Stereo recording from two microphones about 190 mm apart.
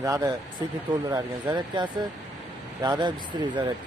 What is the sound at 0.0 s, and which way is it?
Speech, 15° right (ahead or behind).